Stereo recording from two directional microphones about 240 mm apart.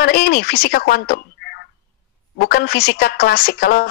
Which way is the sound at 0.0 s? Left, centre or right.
Left.